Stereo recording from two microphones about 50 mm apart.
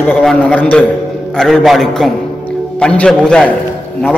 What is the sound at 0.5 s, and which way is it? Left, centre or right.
Speech, left.